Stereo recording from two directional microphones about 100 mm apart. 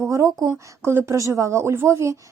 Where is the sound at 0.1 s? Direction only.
35° right (ahead or behind).